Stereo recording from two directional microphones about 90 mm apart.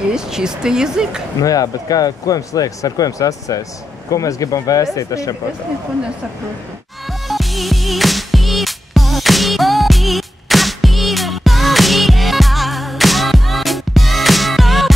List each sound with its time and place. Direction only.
0.1 s speech: 5° right (ahead or behind)
1.4 s speech: 40° left (ahead or behind)
7.1 s music: centre (ahead or behind)